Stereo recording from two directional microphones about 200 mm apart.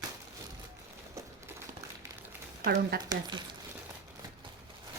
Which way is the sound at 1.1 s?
15° right (ahead or behind).